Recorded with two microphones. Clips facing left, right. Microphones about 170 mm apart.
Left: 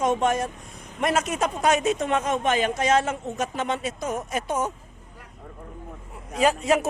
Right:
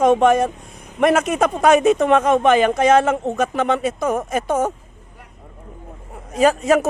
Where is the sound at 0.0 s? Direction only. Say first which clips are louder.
Right 9 dB; 60° right (ahead or behind).